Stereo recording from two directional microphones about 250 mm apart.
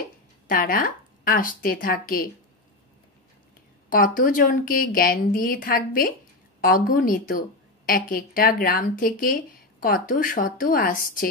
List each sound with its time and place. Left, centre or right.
0.5 s a woman's voice: left
3.9 s a woman's voice: left